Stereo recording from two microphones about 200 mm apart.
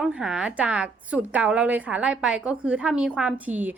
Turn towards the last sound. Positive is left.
turn(degrees=-10)  # may be behind; listen again after turning